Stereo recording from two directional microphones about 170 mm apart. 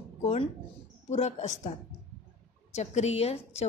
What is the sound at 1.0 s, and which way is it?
Speech, 45° left (ahead or behind).